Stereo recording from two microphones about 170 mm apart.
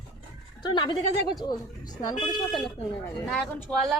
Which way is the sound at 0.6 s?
25° left (ahead or behind).